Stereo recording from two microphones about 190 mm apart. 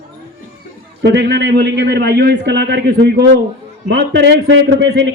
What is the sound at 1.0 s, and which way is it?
A man's voice, 60° right (ahead or behind).